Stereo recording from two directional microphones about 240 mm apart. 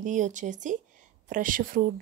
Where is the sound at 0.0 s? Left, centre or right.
Right.